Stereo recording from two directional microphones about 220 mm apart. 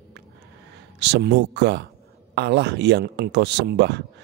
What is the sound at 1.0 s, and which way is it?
Speech, 50° right (ahead or behind).